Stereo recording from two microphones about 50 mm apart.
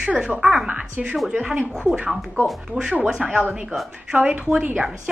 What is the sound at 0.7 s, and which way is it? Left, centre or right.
Speech, right.